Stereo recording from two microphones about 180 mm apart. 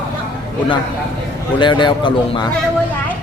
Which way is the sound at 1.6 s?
25° left (ahead or behind).